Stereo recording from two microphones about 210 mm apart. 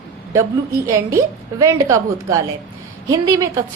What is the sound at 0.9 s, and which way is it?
A woman's voice, 15° right (ahead or behind).